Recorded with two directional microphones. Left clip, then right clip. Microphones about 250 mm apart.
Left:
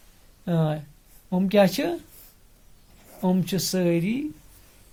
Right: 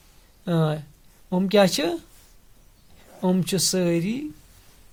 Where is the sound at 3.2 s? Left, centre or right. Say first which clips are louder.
Right 3 dB; right.